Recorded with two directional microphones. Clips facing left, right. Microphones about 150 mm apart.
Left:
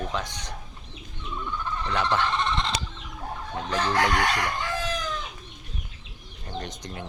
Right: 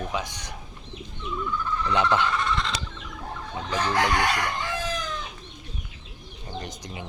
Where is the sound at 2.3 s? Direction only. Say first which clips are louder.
Even; 25° left (ahead or behind).